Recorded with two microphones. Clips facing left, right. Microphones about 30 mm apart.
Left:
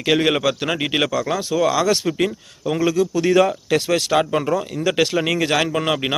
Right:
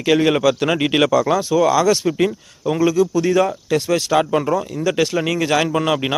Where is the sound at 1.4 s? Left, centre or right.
Left.